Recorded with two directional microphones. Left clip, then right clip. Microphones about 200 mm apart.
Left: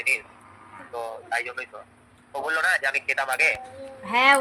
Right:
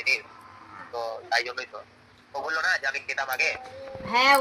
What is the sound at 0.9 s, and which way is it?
Speech, 5° right (ahead or behind).